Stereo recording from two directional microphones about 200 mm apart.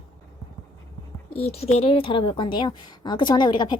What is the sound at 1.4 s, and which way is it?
Speech, 30° left (ahead or behind).